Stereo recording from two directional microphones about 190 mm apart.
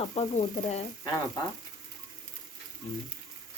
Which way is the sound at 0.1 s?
35° left (ahead or behind).